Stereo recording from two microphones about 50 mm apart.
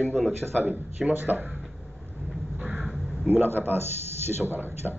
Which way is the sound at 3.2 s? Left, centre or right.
Right.